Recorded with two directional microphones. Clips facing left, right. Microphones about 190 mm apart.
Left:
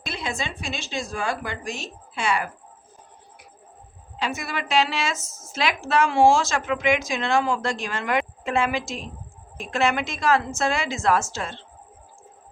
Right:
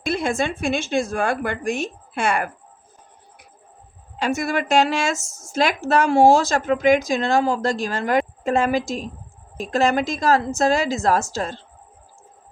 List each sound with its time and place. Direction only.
0.0 s a woman's voice: 50° right (ahead or behind)
4.2 s speech: 45° right (ahead or behind)